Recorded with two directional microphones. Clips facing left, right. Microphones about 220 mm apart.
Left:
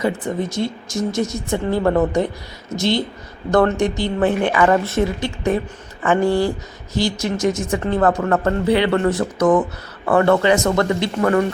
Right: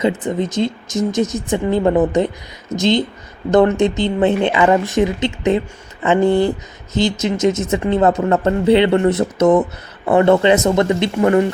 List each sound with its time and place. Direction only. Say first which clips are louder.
0.0 s a woman's voice: right 3 dB; 20° right (ahead or behind)